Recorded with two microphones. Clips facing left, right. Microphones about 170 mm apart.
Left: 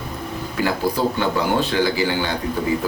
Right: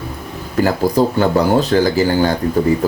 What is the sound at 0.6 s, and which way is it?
Speech, 40° right (ahead or behind).